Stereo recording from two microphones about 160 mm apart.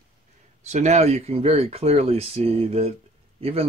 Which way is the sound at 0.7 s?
45° right (ahead or behind).